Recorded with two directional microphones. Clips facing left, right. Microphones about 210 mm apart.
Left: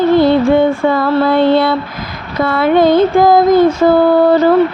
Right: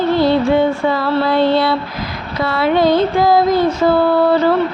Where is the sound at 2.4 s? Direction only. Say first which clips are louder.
Left 4 dB; 50° left (ahead or behind).